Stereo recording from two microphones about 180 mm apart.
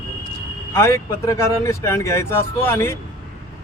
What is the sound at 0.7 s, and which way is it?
Speech, 15° left (ahead or behind).